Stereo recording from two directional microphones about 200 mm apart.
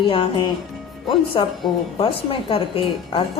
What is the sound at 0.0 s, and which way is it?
A woman's voice, 25° left (ahead or behind).